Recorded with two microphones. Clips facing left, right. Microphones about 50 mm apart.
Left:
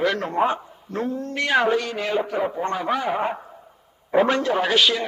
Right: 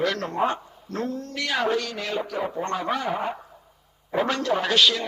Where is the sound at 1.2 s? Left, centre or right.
Left.